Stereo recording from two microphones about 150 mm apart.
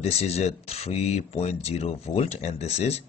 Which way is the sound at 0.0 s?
45° left (ahead or behind).